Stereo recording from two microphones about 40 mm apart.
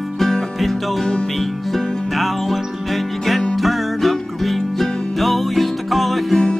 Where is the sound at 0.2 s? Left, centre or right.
Centre.